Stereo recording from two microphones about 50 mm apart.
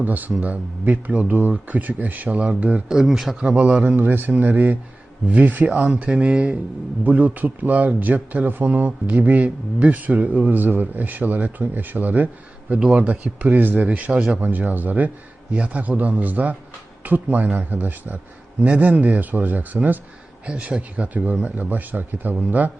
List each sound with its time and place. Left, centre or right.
0.0 s speech: right
2.9 s speech: centre
3.4 s a man's voice: right
3.8 s a man's voice: right
14.1 s a man's voice: centre
14.4 s a man's voice: right